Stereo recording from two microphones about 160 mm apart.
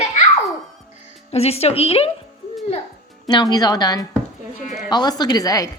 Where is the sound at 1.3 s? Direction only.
40° left (ahead or behind).